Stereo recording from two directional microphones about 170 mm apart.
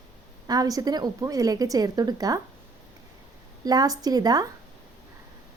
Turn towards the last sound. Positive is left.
turn(degrees=-20)  # may be behind; listen again after turning